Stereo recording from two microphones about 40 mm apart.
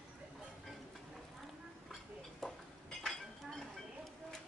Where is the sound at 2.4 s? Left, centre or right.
Centre.